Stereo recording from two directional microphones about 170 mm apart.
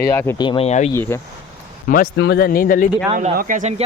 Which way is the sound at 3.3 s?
50° right (ahead or behind).